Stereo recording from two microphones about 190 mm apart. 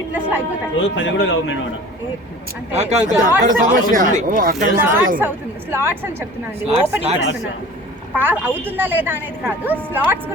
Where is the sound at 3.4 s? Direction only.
45° right (ahead or behind).